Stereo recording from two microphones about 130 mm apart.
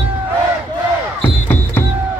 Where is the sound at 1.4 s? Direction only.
15° left (ahead or behind).